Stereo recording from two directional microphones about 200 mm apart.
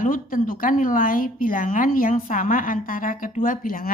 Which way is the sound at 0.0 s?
40° left (ahead or behind).